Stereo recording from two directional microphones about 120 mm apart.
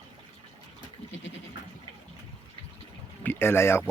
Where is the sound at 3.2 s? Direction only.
15° left (ahead or behind).